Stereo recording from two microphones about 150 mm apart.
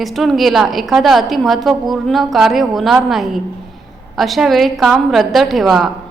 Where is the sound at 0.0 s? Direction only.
Centre (ahead or behind).